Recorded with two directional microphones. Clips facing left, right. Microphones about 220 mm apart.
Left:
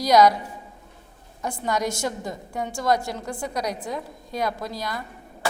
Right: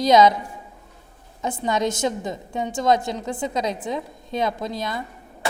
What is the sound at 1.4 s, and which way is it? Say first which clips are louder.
A woman's voice: right 3 dB; 20° right (ahead or behind).